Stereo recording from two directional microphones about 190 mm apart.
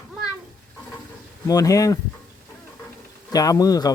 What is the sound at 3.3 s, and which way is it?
Speech, 20° left (ahead or behind).